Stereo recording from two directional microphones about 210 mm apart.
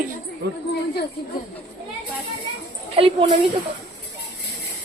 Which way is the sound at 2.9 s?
25° right (ahead or behind).